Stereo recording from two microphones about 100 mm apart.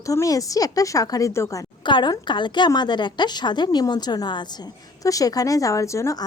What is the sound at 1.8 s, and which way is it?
A woman's voice, 50° left (ahead or behind).